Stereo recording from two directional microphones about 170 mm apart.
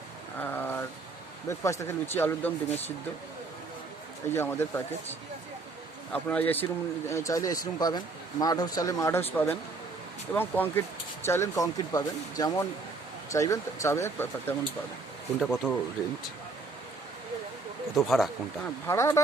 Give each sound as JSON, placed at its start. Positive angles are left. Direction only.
{"t": 0.3, "sound": "a sound", "side_deg": 10}
{"t": 1.5, "sound": "speech", "side_deg": 15}
{"t": 4.3, "sound": "speech", "side_deg": 15}
{"t": 6.1, "sound": "speech", "side_deg": 10}
{"t": 15.4, "sound": "speech", "side_deg": 0}
{"t": 17.9, "sound": "speech", "side_deg": 0}
{"t": 18.9, "sound": "speech", "side_deg": 15}